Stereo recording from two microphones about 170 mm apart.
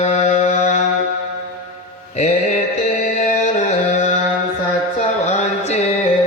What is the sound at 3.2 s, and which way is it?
Music, 50° left (ahead or behind).